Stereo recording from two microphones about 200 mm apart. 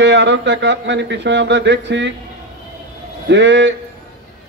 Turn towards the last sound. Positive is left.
turn(degrees=-65)  # may be behind; listen again after turning